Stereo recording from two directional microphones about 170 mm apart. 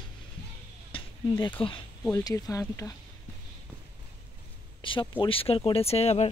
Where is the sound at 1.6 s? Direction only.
30° left (ahead or behind).